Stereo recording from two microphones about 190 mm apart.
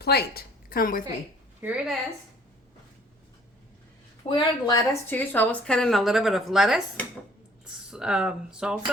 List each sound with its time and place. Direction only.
0.0 s a woman's voice: 55° left (ahead or behind)
1.6 s a woman's voice: 5° right (ahead or behind)
4.2 s a woman's voice: 25° left (ahead or behind)
5.1 s a woman's voice: 10° left (ahead or behind)